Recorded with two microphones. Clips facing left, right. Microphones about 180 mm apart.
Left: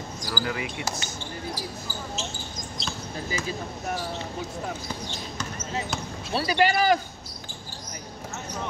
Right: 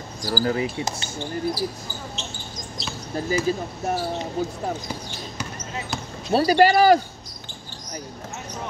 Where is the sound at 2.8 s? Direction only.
Centre (ahead or behind).